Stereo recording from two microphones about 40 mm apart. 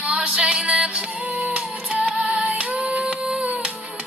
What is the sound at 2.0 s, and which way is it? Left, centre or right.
Music, right.